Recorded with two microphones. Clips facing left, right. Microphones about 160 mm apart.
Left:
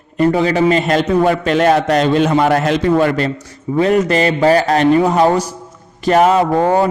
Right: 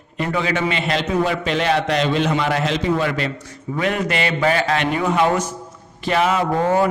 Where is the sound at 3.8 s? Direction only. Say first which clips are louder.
Left 8 dB; 35° left (ahead or behind).